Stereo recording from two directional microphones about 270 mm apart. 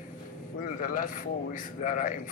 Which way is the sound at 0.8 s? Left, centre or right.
Left.